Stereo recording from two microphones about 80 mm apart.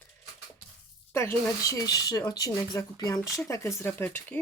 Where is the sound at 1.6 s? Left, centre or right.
Left.